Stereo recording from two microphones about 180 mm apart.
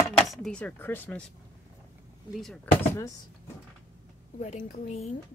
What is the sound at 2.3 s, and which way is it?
Speech, centre (ahead or behind).